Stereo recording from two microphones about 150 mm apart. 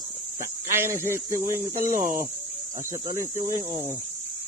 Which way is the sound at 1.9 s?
65° right (ahead or behind).